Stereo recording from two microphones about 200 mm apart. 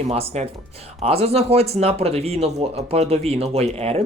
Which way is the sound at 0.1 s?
30° right (ahead or behind).